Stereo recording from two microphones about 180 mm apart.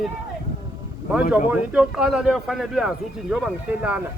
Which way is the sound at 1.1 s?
5° right (ahead or behind).